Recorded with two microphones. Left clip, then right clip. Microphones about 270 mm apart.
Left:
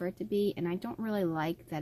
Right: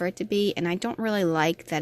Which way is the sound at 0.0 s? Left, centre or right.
Right.